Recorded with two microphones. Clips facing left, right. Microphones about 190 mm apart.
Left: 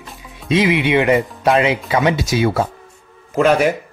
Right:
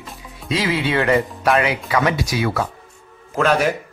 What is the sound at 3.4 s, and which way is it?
Speech, 10° left (ahead or behind).